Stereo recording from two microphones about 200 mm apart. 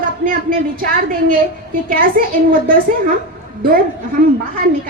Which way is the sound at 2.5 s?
45° right (ahead or behind).